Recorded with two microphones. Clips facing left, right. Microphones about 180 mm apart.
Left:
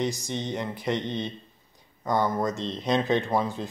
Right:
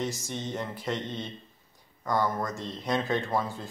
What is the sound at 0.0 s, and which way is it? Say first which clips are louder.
Speech: left 4 dB; 15° left (ahead or behind).